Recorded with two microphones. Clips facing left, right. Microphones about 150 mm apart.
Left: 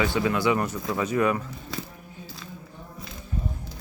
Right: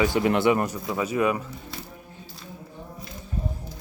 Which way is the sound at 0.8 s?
10° right (ahead or behind).